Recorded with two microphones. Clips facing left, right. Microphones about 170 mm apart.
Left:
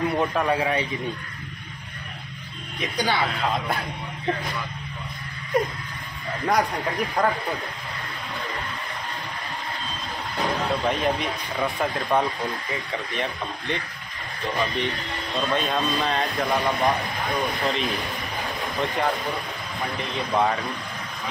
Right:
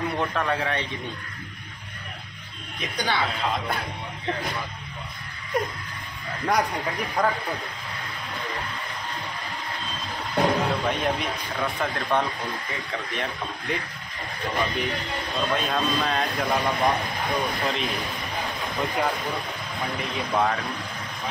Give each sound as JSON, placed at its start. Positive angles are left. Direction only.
{"t": 0.2, "sound": "a man's voice", "side_deg": 15}
{"t": 2.8, "sound": "speech", "side_deg": 0}
{"t": 5.5, "sound": "speech", "side_deg": 0}
{"t": 10.3, "sound": "speech", "side_deg": 0}